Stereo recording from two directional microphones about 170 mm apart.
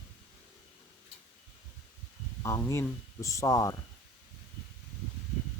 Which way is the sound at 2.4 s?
15° left (ahead or behind).